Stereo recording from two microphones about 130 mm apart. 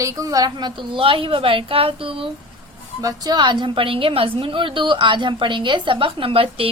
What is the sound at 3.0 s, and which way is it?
A woman's voice, 25° right (ahead or behind).